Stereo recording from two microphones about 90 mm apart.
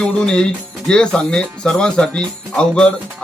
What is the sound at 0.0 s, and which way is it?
Speech, 10° left (ahead or behind).